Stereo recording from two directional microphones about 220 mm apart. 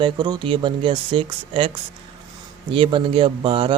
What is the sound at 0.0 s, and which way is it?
Speech, 20° right (ahead or behind).